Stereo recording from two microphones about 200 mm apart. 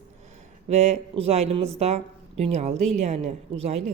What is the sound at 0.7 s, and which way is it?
Speech, 35° right (ahead or behind).